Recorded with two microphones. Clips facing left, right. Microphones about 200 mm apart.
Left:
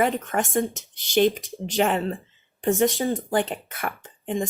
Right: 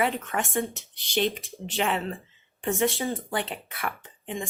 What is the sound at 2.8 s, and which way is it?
Speech, 40° left (ahead or behind).